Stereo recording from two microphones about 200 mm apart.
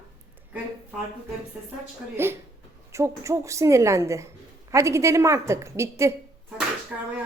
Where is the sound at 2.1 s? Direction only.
10° right (ahead or behind).